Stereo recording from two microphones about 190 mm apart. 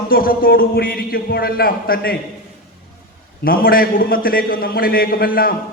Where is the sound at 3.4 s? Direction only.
50° left (ahead or behind).